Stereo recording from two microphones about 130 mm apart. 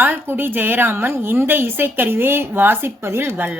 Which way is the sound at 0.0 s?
15° right (ahead or behind).